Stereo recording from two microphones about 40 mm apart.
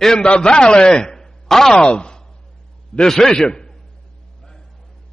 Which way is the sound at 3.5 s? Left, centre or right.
Centre.